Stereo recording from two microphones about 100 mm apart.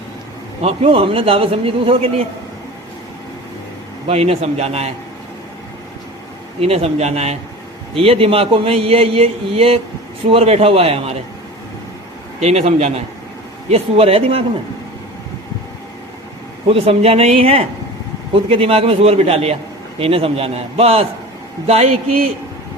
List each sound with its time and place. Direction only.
0.6 s a man's voice: 85° right; by 2.2 s 70° right (ahead or behind)
4.0 s a man's voice: 85° right
6.6 s a man's voice: 90° right
7.9 s a man's voice: 70° right (ahead or behind)
12.4 s a man's voice: 90° right; by 14.4 s 75° right (ahead or behind)
16.6 s a man's voice: 70° right (ahead or behind); by 19.5 s 90° right
20.0 s a man's voice: 70° right (ahead or behind); by 22.3 s 90° right